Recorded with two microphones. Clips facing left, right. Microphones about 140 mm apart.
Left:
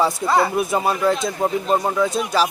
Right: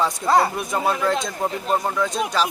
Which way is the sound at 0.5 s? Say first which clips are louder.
Left 3 dB; 5° left (ahead or behind).